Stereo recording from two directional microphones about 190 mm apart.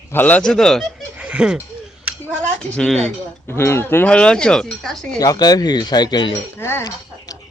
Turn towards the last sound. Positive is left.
turn(degrees=10)  # may be behind; listen again after turning